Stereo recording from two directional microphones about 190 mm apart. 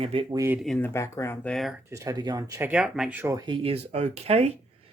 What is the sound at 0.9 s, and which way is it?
Speech, 15° left (ahead or behind).